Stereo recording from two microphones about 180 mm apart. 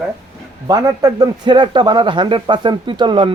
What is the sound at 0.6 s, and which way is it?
A man's voice, 20° right (ahead or behind).